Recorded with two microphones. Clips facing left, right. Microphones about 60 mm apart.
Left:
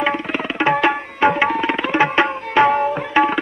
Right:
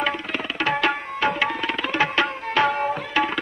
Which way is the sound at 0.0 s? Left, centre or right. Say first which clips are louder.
Left 5 dB; left.